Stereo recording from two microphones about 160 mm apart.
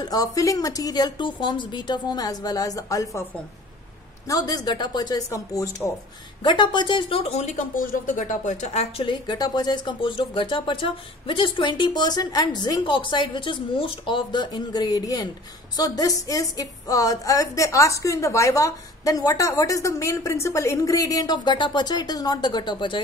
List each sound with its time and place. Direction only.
0.0 s a woman's voice: 25° left (ahead or behind)
4.3 s a woman's voice: 25° left (ahead or behind); by 9.0 s 45° left (ahead or behind)
9.0 s a woman's voice: 25° left (ahead or behind)